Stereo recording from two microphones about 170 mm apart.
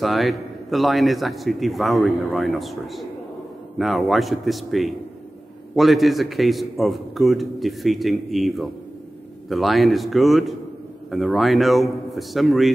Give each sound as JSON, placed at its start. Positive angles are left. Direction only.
{"t": 0.0, "sound": "a man's voice", "side_deg": 0}